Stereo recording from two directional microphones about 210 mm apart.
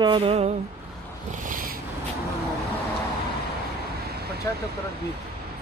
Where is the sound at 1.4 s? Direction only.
40° right (ahead or behind).